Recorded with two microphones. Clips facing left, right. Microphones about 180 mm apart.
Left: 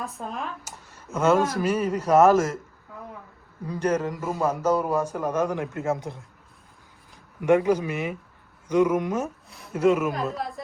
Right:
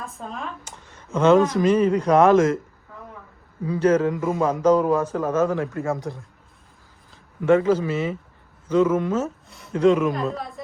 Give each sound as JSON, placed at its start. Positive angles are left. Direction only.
{"t": 0.1, "sound": "speech", "side_deg": 0}
{"t": 3.8, "sound": "speech", "side_deg": 10}
{"t": 5.6, "sound": "speech", "side_deg": 0}
{"t": 6.0, "sound": "speech", "side_deg": 20}
{"t": 7.4, "sound": "speech", "side_deg": 15}
{"t": 9.5, "sound": "speech", "side_deg": 0}